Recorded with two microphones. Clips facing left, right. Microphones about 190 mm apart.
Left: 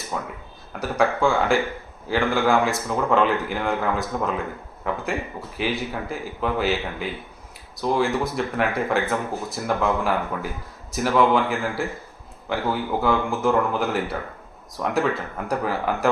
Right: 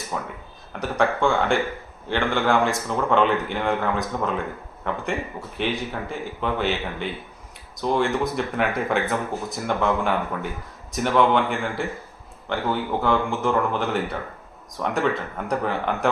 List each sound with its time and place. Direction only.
0.2 s speech: centre (ahead or behind)
13.0 s speech: centre (ahead or behind)